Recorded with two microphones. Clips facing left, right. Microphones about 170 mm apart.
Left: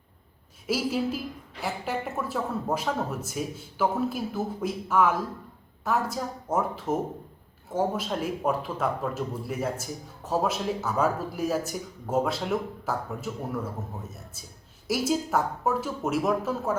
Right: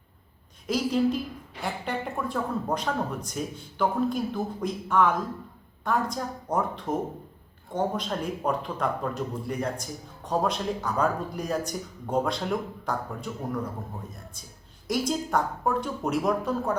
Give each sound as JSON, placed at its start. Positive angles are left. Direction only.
{"t": 0.7, "sound": "speech", "side_deg": 5}